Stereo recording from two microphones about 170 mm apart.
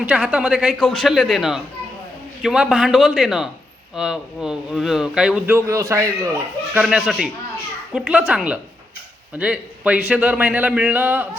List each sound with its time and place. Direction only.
0.0 s speech: 5° right (ahead or behind)
5.5 s a man's voice: 20° right (ahead or behind)
6.7 s a man's voice: 5° right (ahead or behind)